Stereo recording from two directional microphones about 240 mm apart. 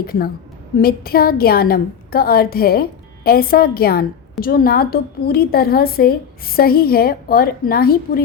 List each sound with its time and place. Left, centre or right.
0.0 s a woman's voice: left